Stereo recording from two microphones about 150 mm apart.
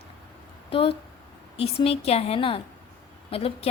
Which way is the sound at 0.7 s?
35° left (ahead or behind).